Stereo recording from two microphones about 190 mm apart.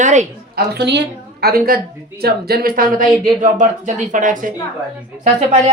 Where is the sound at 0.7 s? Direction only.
65° right (ahead or behind); by 4.5 s 45° right (ahead or behind).